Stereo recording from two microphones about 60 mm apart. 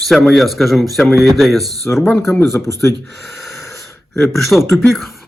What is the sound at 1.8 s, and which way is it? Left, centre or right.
Speech, left.